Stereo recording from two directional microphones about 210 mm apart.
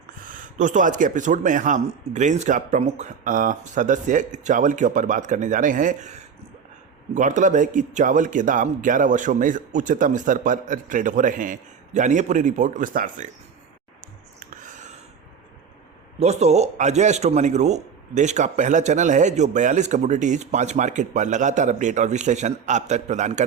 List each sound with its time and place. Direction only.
0.2 s speech: 40° right (ahead or behind)
14.3 s a sound: 35° right (ahead or behind)
16.2 s speech: 30° right (ahead or behind)